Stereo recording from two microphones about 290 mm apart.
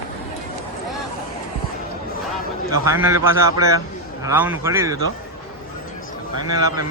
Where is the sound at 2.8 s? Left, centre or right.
Centre.